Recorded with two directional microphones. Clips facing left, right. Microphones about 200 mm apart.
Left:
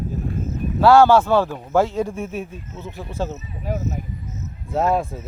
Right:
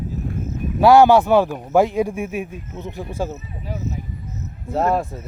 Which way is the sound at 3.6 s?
50° left (ahead or behind).